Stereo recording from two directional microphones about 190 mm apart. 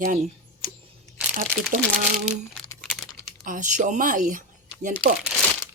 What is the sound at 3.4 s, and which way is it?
Speech, 40° right (ahead or behind).